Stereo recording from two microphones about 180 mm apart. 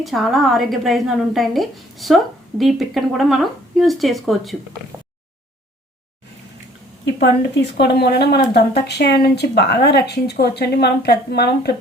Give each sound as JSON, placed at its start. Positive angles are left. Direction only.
{"t": 0.0, "sound": "a woman's voice", "side_deg": 0}
{"t": 7.0, "sound": "speech", "side_deg": 70}